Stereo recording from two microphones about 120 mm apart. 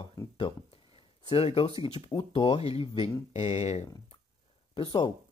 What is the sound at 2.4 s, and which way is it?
Speech, 55° left (ahead or behind).